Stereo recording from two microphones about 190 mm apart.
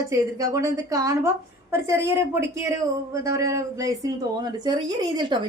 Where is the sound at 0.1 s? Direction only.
15° right (ahead or behind).